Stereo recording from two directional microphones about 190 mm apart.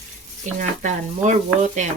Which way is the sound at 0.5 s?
40° right (ahead or behind).